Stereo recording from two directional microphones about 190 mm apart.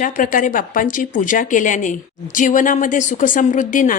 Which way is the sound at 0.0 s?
45° left (ahead or behind).